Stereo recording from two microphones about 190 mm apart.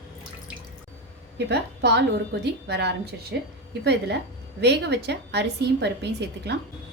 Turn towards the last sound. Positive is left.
turn(degrees=-65)  # may be behind; listen again after turning